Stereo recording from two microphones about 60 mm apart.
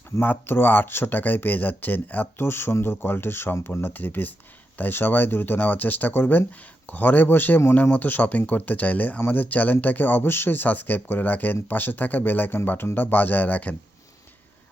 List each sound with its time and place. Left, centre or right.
0.2 s speech: left